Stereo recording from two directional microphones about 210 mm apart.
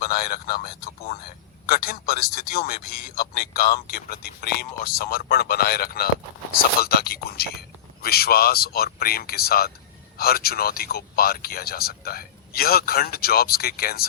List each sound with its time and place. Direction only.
0.0 s a man's voice: 45° left (ahead or behind)